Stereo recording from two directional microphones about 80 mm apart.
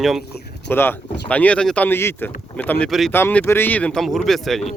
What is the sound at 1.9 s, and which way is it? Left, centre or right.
Speech, left.